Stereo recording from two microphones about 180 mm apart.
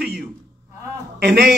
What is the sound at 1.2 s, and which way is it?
Speech, 70° right (ahead or behind).